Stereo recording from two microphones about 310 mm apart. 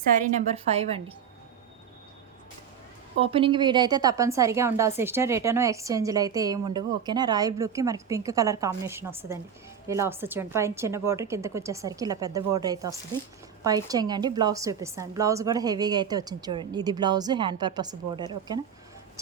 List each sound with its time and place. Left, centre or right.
0.2 s a woman's voice: right
3.2 s a woman's voice: centre